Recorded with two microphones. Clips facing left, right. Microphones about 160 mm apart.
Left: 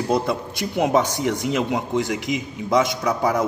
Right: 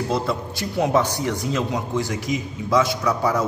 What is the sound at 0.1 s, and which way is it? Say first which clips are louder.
A man's voice: left 2 dB; 20° left (ahead or behind).